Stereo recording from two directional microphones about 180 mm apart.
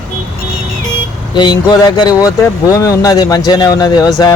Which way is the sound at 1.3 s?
25° left (ahead or behind).